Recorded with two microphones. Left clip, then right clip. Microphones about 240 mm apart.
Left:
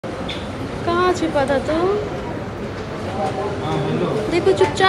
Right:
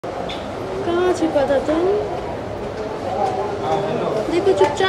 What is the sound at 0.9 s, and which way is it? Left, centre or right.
Speech, centre.